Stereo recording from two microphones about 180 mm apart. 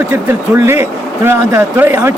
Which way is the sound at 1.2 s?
15° right (ahead or behind).